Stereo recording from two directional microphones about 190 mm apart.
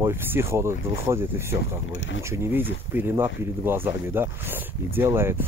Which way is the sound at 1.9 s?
90° left.